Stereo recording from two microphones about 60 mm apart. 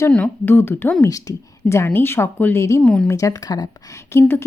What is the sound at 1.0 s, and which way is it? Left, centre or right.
Speech, left.